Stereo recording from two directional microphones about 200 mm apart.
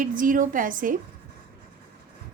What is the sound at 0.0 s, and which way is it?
Speech, 40° right (ahead or behind).